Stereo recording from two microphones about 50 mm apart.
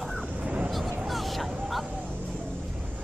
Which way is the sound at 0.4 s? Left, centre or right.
Right.